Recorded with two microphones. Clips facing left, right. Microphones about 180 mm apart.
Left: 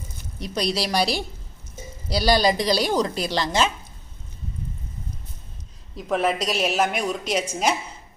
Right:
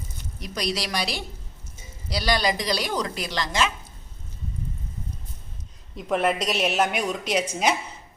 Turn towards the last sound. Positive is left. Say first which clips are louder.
# even
turn(degrees=0)  # may be behind; listen again after turning